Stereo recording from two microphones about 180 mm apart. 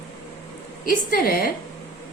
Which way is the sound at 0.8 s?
55° left (ahead or behind).